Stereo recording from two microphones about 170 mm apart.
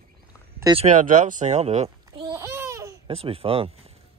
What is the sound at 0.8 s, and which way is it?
Speech, 45° right (ahead or behind).